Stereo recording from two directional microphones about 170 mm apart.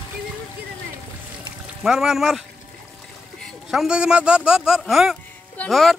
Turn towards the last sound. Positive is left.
turn(degrees=0)  # may be behind; listen again after turning